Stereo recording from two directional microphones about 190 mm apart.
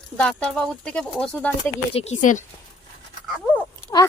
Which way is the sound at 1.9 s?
35° left (ahead or behind).